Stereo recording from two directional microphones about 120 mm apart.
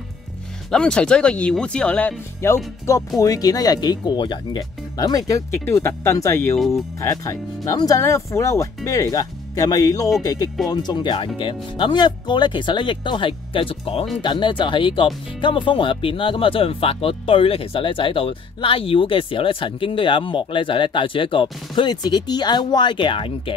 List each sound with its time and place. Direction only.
0.7 s speech: 5° left (ahead or behind); by 23.5 s 45° left (ahead or behind)